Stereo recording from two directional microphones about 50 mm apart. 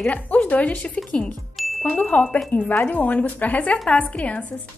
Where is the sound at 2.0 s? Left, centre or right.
Left.